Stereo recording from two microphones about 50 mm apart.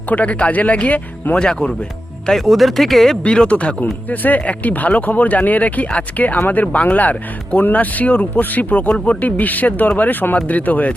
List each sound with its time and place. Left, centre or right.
0.1 s speech: left
1.5 s speech: centre
2.4 s speech: centre
3.2 s speech: left